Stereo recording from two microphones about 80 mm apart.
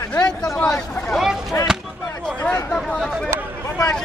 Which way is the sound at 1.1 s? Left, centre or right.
Centre.